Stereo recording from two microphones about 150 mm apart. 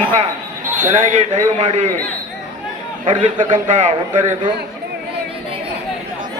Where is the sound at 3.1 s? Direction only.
55° right (ahead or behind).